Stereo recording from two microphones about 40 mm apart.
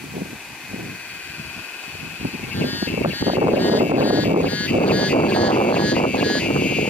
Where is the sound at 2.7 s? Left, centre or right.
Left.